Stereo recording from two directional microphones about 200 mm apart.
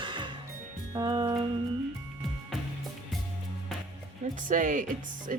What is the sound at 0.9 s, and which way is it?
Speech, 20° right (ahead or behind).